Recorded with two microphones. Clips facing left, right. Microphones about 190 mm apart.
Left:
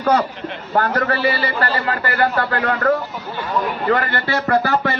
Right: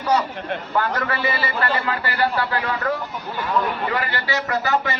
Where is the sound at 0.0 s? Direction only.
55° left (ahead or behind).